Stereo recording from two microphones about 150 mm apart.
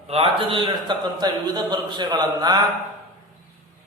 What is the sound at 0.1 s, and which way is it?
A man's voice, 40° right (ahead or behind).